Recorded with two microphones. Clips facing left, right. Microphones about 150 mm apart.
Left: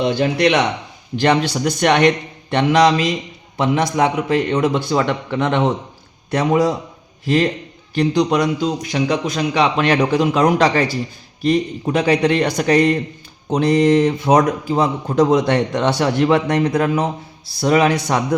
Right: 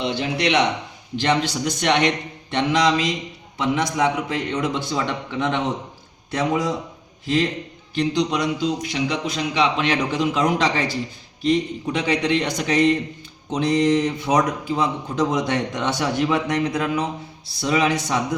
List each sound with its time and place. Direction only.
0.0 s a man's voice: 50° left (ahead or behind); by 5.7 s 75° left (ahead or behind)
6.5 s a man's voice: 60° left (ahead or behind)